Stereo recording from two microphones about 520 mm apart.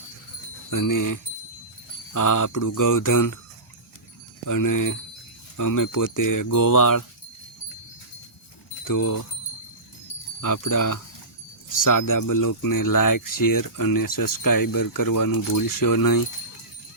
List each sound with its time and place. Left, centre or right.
0.7 s speech: left
4.4 s speech: left
8.8 s speech: left
10.4 s speech: left